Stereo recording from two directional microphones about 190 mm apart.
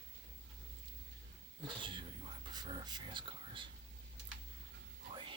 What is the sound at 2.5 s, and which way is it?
Speech, 20° right (ahead or behind).